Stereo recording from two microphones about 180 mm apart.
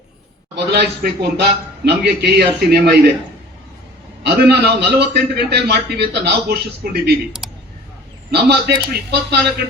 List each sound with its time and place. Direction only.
0.5 s a man's voice: 65° right (ahead or behind)
4.2 s a man's voice: 65° right (ahead or behind)
7.4 s a sound: centre (ahead or behind)
8.3 s a man's voice: 65° right (ahead or behind)